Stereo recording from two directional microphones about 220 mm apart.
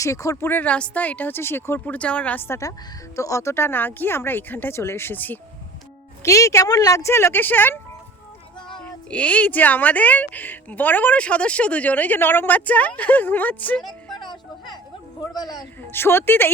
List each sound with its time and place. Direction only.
0.0 s a woman's voice: 15° left (ahead or behind)
8.8 s a woman's voice: 5° left (ahead or behind)
14.1 s music: 20° left (ahead or behind)
15.4 s a woman's voice: 15° left (ahead or behind)